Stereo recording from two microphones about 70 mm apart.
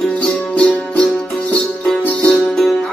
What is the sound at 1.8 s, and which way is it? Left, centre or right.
Music, centre.